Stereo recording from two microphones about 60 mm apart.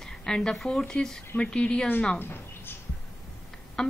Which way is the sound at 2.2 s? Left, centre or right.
Left.